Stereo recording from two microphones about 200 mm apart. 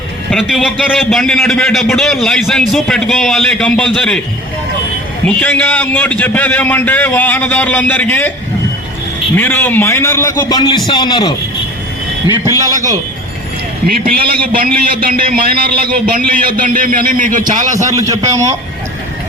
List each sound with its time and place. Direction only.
0.3 s a man's voice: centre (ahead or behind)
5.2 s a man's voice: 5° left (ahead or behind)
9.3 s a man's voice: 10° left (ahead or behind)
12.5 s a man's voice: 15° right (ahead or behind)
14.3 s a man's voice: 45° right (ahead or behind)
17.7 s a man's voice: 15° right (ahead or behind)